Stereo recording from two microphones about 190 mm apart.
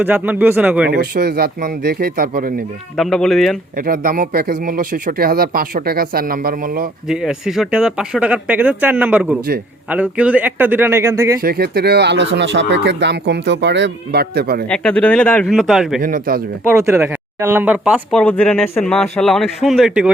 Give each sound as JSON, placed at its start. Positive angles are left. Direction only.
{"t": 0.0, "sound": "speech", "side_deg": -10}
{"t": 0.9, "sound": "speech", "side_deg": -55}
{"t": 3.0, "sound": "speech", "side_deg": 0}
{"t": 3.8, "sound": "speech", "side_deg": -50}
{"t": 7.1, "sound": "speech", "side_deg": -5}
{"t": 11.3, "sound": "speech", "side_deg": -55}
{"t": 14.7, "sound": "speech", "side_deg": 5}
{"t": 16.0, "sound": "speech", "side_deg": -45}
{"t": 16.7, "sound": "speech", "side_deg": -15}
{"t": 18.1, "sound": "speech", "side_deg": 5}